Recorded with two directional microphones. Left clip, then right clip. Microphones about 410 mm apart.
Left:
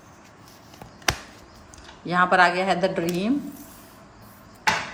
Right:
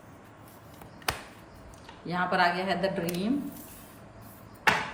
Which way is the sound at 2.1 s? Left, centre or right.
Centre.